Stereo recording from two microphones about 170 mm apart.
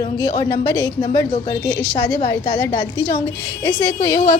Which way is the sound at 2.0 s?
15° left (ahead or behind).